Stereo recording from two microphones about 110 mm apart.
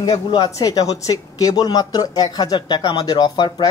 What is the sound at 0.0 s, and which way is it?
Speech, 40° left (ahead or behind).